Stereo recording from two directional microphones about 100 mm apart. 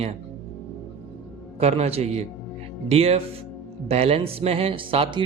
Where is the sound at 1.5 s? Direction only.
90° right.